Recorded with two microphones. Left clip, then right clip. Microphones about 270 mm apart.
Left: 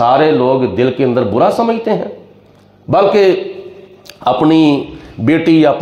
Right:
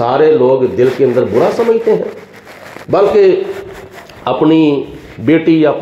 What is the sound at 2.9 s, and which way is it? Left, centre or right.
A man's voice, left.